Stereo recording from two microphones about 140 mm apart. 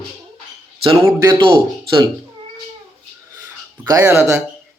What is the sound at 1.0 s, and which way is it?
Speech, 25° right (ahead or behind).